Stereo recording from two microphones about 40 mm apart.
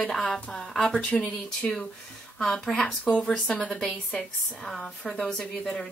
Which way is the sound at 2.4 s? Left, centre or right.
Centre.